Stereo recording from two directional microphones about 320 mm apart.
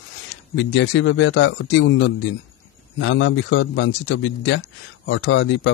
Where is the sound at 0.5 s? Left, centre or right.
Left.